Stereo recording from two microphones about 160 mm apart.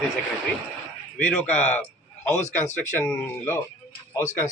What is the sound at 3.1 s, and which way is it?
Speech, 15° left (ahead or behind).